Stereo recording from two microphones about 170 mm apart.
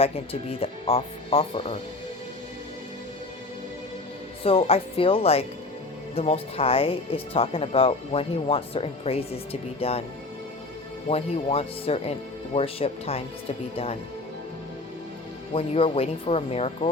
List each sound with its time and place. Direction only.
0.6 s speech: 35° left (ahead or behind)
4.4 s speech: 35° left (ahead or behind)
11.1 s speech: 35° left (ahead or behind)
15.5 s speech: 35° left (ahead or behind)